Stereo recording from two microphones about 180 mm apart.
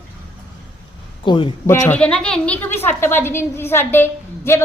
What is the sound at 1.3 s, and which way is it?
Speech, 30° left (ahead or behind).